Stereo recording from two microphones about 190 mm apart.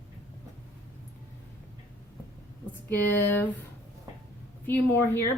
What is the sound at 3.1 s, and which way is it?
Speech, 10° left (ahead or behind).